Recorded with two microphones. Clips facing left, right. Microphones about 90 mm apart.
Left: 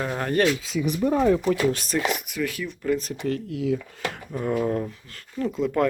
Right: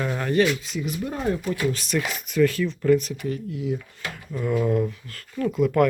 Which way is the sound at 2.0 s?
15° left (ahead or behind).